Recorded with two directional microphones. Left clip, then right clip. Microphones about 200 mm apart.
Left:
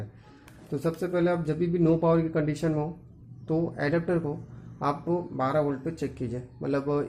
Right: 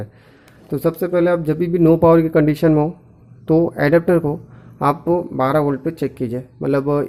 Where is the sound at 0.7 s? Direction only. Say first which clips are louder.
Right 10 dB; 40° right (ahead or behind).